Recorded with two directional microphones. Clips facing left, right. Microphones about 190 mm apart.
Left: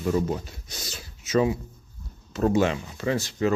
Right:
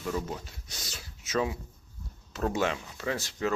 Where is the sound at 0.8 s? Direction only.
Centre (ahead or behind).